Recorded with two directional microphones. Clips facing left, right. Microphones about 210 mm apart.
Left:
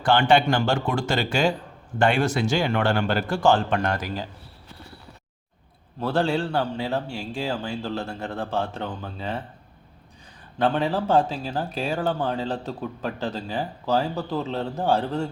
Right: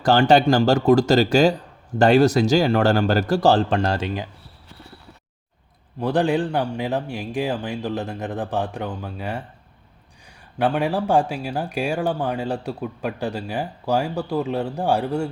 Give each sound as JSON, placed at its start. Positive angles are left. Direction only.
{"t": 0.0, "sound": "speech", "side_deg": -40}
{"t": 6.0, "sound": "speech", "side_deg": -15}
{"t": 10.6, "sound": "speech", "side_deg": -15}